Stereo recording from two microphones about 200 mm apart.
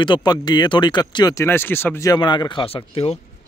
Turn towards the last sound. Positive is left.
turn(degrees=30)  # may be behind; listen again after turning